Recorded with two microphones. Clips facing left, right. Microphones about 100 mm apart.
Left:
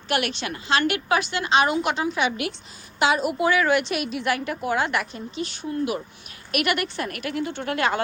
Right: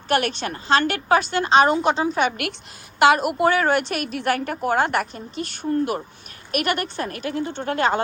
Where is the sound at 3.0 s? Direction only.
60° right (ahead or behind).